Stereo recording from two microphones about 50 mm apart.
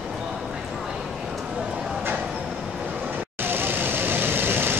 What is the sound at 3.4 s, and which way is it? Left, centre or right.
Vehicle, right.